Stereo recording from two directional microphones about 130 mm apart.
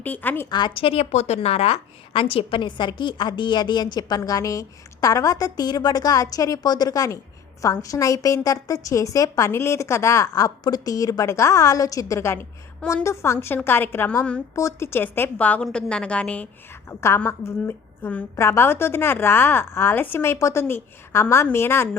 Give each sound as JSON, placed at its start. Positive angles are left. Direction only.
{"t": 0.0, "sound": "a woman's voice", "side_deg": 15}
{"t": 0.5, "sound": "a woman's voice", "side_deg": 40}